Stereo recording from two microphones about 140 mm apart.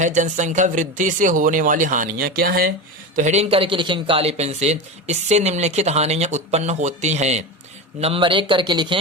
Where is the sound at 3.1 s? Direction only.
55° right (ahead or behind).